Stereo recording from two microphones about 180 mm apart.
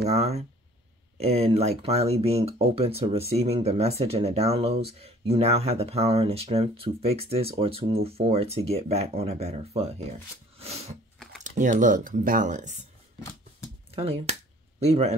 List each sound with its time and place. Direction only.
0.0 s speech: 40° right (ahead or behind)
10.6 s a sound: 35° right (ahead or behind)
11.4 s speech: 45° right (ahead or behind)
13.9 s speech: 35° right (ahead or behind)